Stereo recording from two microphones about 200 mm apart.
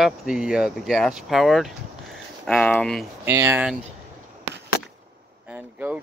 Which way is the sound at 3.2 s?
10° right (ahead or behind).